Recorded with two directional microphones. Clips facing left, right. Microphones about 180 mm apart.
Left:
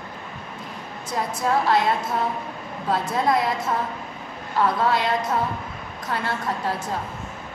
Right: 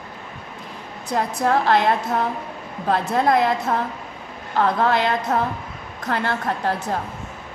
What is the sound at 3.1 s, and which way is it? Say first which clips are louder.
Speech: right 4 dB; 55° right (ahead or behind).